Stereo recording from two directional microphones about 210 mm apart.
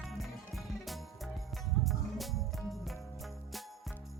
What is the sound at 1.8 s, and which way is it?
Music, centre (ahead or behind).